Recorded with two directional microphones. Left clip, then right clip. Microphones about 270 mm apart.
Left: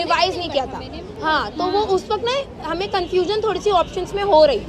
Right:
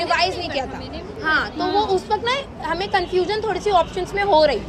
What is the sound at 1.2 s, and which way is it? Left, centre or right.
Speech, centre.